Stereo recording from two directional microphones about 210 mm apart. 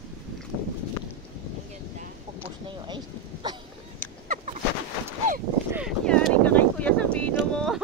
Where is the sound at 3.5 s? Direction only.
20° right (ahead or behind).